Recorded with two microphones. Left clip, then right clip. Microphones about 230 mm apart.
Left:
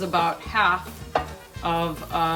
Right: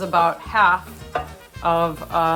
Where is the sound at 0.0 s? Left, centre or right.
Centre.